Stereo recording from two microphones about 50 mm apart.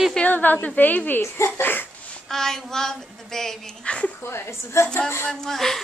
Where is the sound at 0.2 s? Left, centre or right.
Left.